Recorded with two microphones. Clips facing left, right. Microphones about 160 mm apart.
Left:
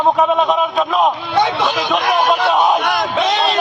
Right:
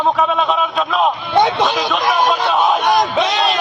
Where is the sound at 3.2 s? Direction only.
30° left (ahead or behind).